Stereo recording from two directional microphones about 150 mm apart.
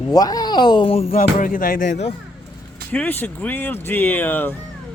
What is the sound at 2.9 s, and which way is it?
Speech, 10° left (ahead or behind).